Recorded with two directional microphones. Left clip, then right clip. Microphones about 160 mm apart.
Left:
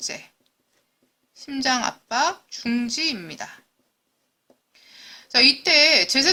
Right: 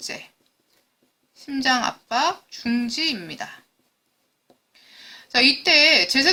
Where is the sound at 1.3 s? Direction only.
25° left (ahead or behind).